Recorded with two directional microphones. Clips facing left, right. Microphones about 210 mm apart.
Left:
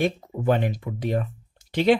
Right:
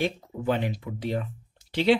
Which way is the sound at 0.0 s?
50° left (ahead or behind).